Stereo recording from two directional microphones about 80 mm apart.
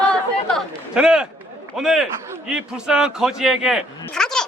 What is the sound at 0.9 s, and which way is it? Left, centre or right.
A man's voice, centre.